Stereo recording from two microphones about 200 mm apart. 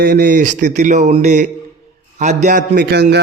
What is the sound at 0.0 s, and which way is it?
A man's voice, 45° right (ahead or behind).